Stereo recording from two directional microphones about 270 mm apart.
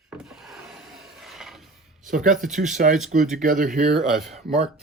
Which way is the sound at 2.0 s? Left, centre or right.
Right.